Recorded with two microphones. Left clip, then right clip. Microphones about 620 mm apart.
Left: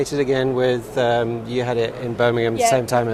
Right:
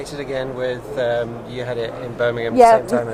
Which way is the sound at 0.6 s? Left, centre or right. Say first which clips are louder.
Left 4 dB; left.